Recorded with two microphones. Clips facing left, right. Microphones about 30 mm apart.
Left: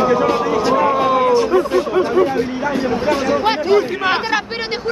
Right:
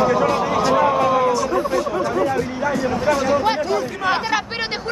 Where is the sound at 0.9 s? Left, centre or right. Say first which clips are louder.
Left 3 dB; left.